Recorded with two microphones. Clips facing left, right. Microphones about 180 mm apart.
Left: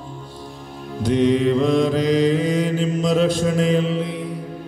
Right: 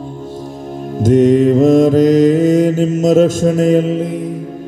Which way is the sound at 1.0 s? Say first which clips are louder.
Right 8 dB; 45° right (ahead or behind).